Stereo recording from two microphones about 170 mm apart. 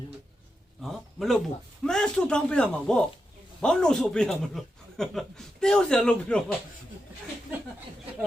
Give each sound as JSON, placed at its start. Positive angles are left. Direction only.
{"t": 0.8, "sound": "a man's voice", "side_deg": 0}